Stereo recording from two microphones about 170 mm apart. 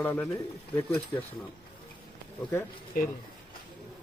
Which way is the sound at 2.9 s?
60° left (ahead or behind).